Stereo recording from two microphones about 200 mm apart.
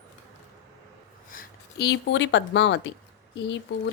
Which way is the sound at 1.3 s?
50° left (ahead or behind).